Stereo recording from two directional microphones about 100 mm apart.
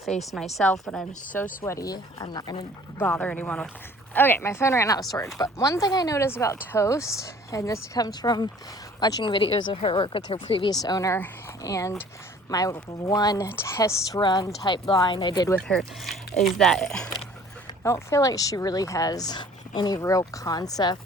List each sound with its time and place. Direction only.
0.0 s speech: centre (ahead or behind)
1.6 s speech: 35° left (ahead or behind)
3.0 s speech: 15° left (ahead or behind); by 9.3 s 40° left (ahead or behind)
9.3 s speech: 60° left (ahead or behind)
10.7 s speech: 40° left (ahead or behind)
13.5 s speech: 25° left (ahead or behind)
14.7 s speech: 50° left (ahead or behind)
15.6 s speech: 5° left (ahead or behind)
17.8 s speech: 30° left (ahead or behind)